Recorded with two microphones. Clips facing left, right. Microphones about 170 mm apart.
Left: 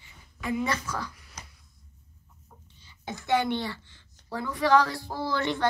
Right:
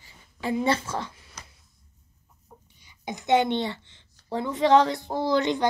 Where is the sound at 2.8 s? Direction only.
15° right (ahead or behind).